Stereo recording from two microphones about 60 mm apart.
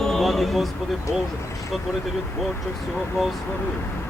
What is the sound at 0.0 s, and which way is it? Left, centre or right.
Speech, centre.